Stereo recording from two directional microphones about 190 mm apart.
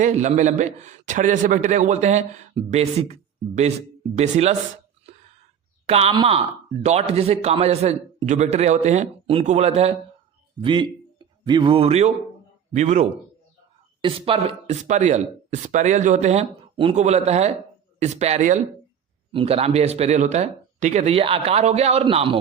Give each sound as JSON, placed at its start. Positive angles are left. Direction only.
{"t": 0.0, "sound": "a man's voice", "side_deg": -40}
{"t": 5.8, "sound": "a man's voice", "side_deg": -30}
{"t": 19.3, "sound": "a man's voice", "side_deg": -30}